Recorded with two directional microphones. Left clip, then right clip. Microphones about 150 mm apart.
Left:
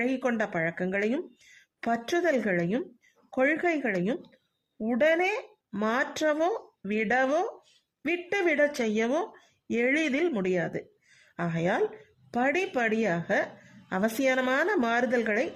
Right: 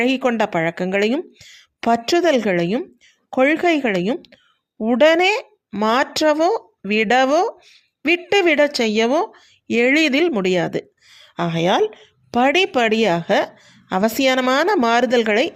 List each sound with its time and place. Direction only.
0.0 s a woman's voice: 40° right (ahead or behind)